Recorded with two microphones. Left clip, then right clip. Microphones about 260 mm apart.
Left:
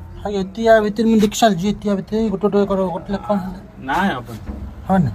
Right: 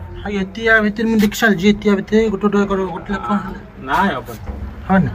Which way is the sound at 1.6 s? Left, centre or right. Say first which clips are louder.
Right 6 dB; left.